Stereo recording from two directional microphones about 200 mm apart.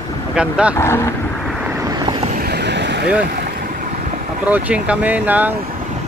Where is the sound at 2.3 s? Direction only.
55° right (ahead or behind).